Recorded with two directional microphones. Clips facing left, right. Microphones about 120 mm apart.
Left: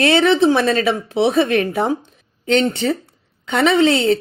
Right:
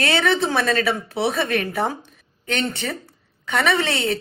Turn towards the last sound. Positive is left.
turn(degrees=25)  # may be behind; listen again after turning